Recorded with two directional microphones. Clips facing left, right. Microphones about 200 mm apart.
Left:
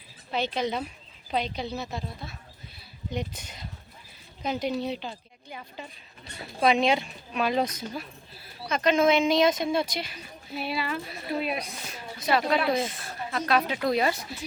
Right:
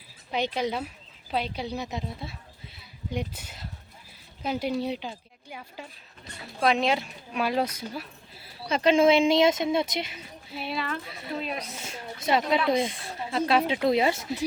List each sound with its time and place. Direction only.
0.3 s a woman's voice: 15° right (ahead or behind)
3.1 s a woman's voice: 10° right (ahead or behind)
8.4 s speech: 30° right (ahead or behind)
10.5 s speech: 5° left (ahead or behind)
11.8 s speech: 25° right (ahead or behind)